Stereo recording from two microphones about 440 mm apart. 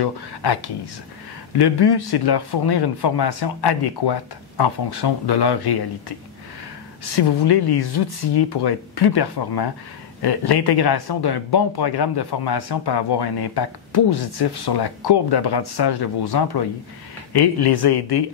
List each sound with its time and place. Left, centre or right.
0.0 s speech: left
7.2 s speech: left